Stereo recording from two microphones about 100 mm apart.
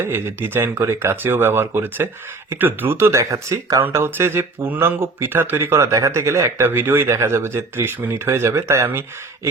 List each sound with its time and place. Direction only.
0.0 s speech: 25° right (ahead or behind)